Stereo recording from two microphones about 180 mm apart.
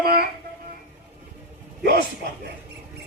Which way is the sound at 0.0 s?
60° right (ahead or behind).